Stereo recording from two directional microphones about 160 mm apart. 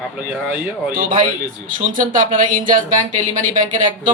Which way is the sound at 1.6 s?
55° right (ahead or behind).